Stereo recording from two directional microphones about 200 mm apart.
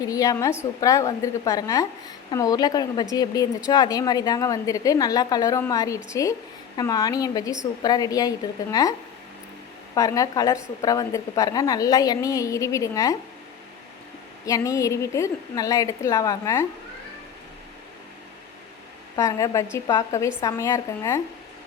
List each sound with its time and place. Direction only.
0.0 s a woman's voice: 15° left (ahead or behind)
14.4 s a woman's voice: 15° left (ahead or behind)
19.1 s a woman's voice: 15° left (ahead or behind)